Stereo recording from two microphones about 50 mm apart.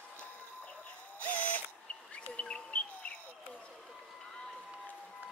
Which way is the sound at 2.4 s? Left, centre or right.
Left.